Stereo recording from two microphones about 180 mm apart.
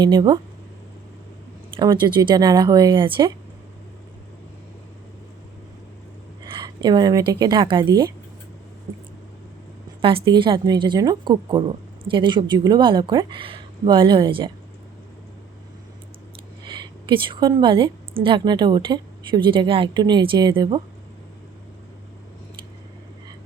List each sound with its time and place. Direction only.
0.0 s a woman's voice: 25° right (ahead or behind)
1.7 s a woman's voice: 25° right (ahead or behind)
6.4 s a woman's voice: 25° right (ahead or behind)
10.0 s a woman's voice: 25° right (ahead or behind)
16.6 s a woman's voice: 25° right (ahead or behind)